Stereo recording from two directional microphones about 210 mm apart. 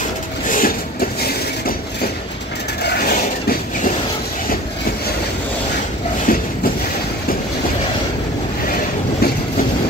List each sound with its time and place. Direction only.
0.5 s vehicle: 40° left (ahead or behind)
2.8 s a sound: 45° left (ahead or behind)
6.3 s train: 45° left (ahead or behind)
8.6 s train: 40° left (ahead or behind)